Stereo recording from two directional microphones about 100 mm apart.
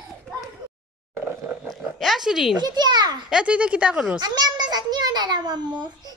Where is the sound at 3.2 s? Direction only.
10° right (ahead or behind).